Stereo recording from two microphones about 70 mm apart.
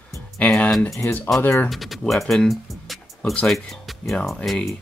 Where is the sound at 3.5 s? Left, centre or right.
Centre.